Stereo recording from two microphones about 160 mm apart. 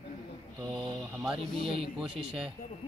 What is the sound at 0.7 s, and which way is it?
Speech, 5° right (ahead or behind).